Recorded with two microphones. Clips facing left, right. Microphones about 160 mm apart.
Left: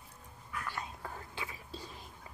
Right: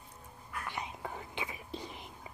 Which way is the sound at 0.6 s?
15° right (ahead or behind).